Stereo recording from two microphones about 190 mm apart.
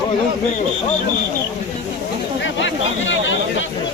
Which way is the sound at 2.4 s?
80° left.